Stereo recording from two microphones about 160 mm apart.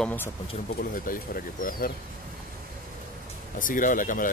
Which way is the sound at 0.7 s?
65° left (ahead or behind).